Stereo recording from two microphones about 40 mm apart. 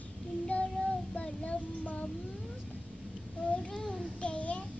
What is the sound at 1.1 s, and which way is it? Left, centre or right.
Child singing, left.